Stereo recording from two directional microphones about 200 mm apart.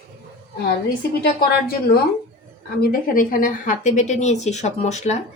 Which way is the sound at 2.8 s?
45° left (ahead or behind).